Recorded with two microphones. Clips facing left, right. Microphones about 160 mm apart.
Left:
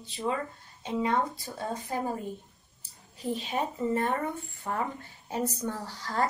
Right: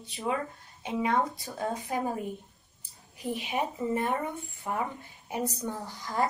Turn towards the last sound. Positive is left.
turn(degrees=-15)  # may be behind; listen again after turning